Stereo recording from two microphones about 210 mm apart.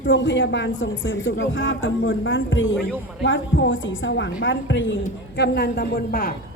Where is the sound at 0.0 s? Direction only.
55° left (ahead or behind).